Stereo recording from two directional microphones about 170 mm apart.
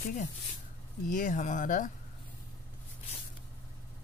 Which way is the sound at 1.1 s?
50° left (ahead or behind).